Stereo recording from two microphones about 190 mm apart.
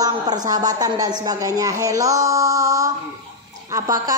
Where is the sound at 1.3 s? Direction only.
20° right (ahead or behind).